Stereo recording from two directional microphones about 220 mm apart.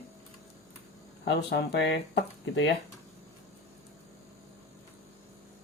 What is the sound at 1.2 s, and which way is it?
Speech, 50° left (ahead or behind).